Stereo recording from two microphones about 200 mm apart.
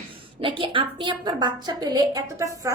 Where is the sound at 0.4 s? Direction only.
25° right (ahead or behind).